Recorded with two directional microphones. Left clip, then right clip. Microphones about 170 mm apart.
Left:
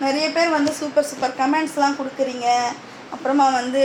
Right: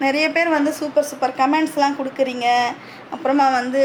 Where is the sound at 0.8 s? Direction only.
20° right (ahead or behind).